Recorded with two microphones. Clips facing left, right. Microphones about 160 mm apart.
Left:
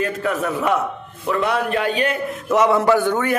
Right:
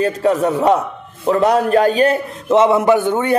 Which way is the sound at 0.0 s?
30° right (ahead or behind).